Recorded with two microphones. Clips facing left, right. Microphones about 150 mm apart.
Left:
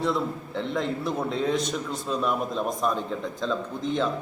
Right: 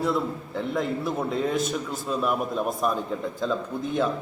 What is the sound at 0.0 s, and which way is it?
A man's voice, 5° right (ahead or behind).